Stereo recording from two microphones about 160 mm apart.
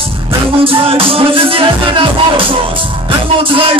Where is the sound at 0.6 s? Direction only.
35° right (ahead or behind).